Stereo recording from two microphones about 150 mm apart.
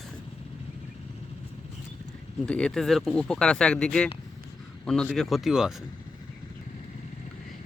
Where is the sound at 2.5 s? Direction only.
5° left (ahead or behind).